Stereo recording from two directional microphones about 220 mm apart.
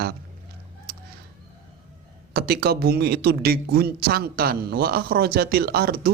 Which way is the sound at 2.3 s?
45° right (ahead or behind).